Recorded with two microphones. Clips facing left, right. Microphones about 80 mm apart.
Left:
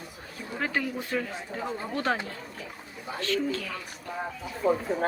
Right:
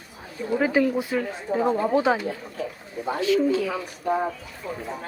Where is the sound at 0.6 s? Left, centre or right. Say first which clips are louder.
Right 8 dB; centre.